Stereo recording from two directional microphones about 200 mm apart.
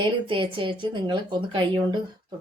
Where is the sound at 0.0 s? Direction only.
25° right (ahead or behind).